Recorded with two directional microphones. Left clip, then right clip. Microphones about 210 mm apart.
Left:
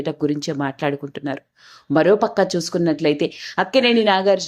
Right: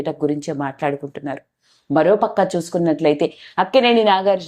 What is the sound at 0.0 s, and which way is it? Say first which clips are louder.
Speech: right 1 dB; 25° left (ahead or behind).